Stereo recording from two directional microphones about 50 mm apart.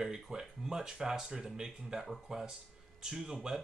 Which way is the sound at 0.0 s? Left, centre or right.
Centre.